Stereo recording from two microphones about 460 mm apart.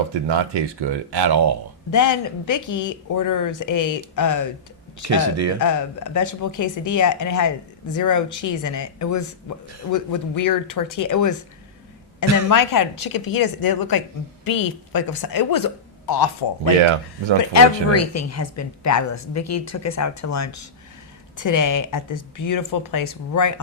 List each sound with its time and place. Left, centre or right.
0.3 s speech: right
1.9 s speech: left
5.0 s speech: right
5.5 s speech: left
12.5 s a woman's voice: left
17.5 s speech: left